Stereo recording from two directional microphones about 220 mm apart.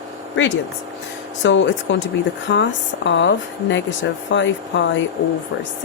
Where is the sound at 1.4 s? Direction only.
55° left (ahead or behind).